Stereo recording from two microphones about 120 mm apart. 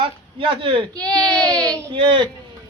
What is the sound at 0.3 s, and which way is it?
Speech, 45° right (ahead or behind).